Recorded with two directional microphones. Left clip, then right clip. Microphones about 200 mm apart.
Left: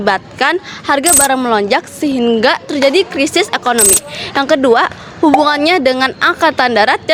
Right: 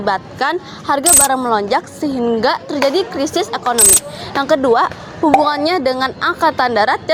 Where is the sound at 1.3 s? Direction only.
35° left (ahead or behind).